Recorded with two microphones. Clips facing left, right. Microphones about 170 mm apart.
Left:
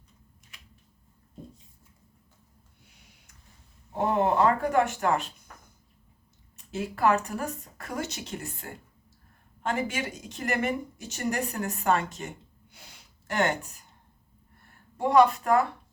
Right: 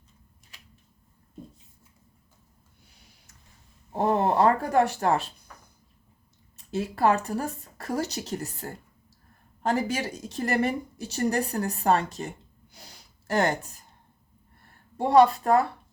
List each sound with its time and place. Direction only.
3.9 s a woman's voice: 35° right (ahead or behind)
6.7 s a woman's voice: 35° right (ahead or behind)
12.7 s a sound: 35° right (ahead or behind)
14.9 s a woman's voice: 30° right (ahead or behind)